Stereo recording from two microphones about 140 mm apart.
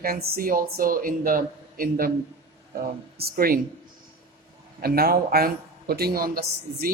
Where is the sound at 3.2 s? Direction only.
90° right.